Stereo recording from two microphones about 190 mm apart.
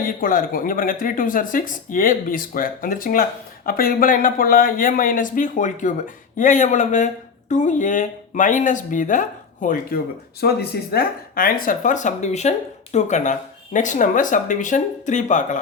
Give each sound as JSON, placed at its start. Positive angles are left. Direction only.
{"t": 0.0, "sound": "speech", "side_deg": 45}
{"t": 10.4, "sound": "speech", "side_deg": 55}